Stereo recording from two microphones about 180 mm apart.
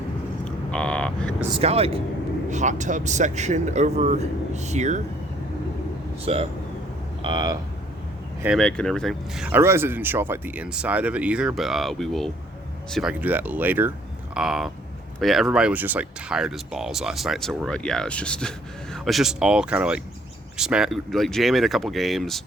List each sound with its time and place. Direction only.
0.4 s vehicle: 5° left (ahead or behind)
1.5 s speech: 35° right (ahead or behind)
6.2 s speech: 30° right (ahead or behind)
8.5 s speech: 5° left (ahead or behind)